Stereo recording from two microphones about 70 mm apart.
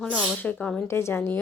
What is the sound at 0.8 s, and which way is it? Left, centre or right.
Speech, left.